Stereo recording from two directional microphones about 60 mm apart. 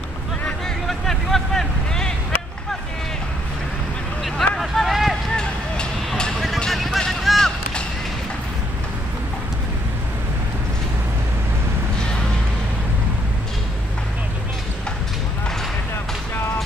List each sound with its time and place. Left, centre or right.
0.8 s vehicle: centre
4.2 s vehicle: centre
5.3 s a sound: centre
6.0 s music: centre
6.7 s a sound: centre
7.0 s run: centre